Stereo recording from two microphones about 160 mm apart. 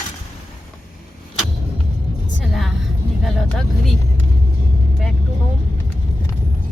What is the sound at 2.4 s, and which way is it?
Vehicle, centre (ahead or behind).